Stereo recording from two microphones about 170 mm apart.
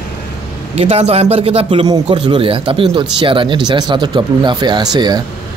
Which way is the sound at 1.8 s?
25° right (ahead or behind).